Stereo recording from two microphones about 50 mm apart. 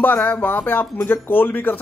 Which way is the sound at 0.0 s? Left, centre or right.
Left.